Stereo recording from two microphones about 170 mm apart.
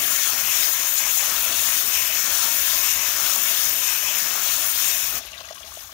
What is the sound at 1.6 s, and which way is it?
Steam, 20° left (ahead or behind).